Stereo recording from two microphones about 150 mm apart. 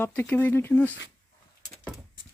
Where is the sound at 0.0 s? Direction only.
10° left (ahead or behind).